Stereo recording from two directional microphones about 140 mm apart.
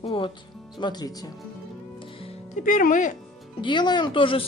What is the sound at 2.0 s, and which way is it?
Music, 40° left (ahead or behind).